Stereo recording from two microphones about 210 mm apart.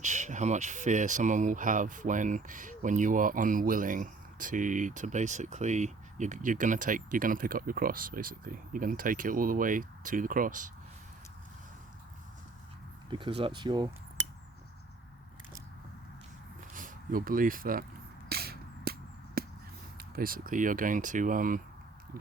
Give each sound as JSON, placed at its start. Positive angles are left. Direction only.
{"t": 0.0, "sound": "speech", "side_deg": -35}
{"t": 13.1, "sound": "speech", "side_deg": -25}
{"t": 16.7, "sound": "speech", "side_deg": -40}
{"t": 18.3, "sound": "a sound", "side_deg": -45}
{"t": 20.0, "sound": "speech", "side_deg": -45}